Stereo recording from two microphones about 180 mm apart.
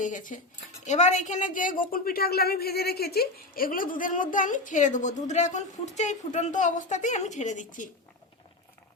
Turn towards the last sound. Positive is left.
turn(degrees=45)  # may be behind; listen again after turning